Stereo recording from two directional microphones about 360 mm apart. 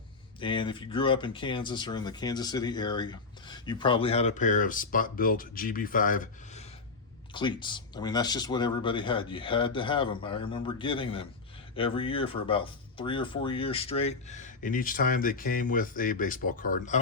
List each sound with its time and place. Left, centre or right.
0.3 s speech: centre